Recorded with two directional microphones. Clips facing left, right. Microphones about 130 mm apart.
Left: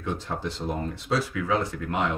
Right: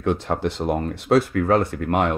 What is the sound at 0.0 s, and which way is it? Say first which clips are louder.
Speech: right 8 dB; 65° right (ahead or behind).